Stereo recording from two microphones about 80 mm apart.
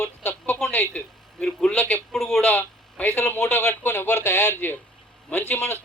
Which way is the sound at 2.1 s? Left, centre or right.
Centre.